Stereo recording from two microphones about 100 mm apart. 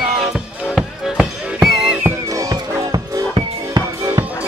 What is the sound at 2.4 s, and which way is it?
Music, 35° right (ahead or behind).